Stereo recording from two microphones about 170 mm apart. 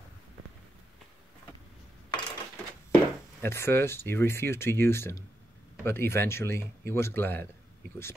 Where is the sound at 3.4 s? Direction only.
15° left (ahead or behind).